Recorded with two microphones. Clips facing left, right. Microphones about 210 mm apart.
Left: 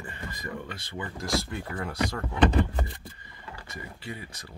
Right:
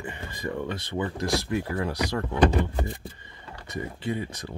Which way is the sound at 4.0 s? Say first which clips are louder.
Right 12 dB; 25° right (ahead or behind).